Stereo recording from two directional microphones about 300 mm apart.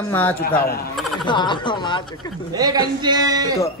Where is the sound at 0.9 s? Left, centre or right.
Centre.